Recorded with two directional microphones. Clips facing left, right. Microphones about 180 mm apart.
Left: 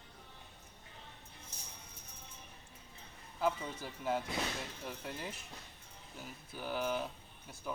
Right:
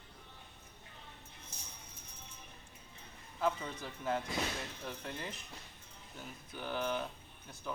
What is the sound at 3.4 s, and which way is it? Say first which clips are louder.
Speech: even; 5° left (ahead or behind).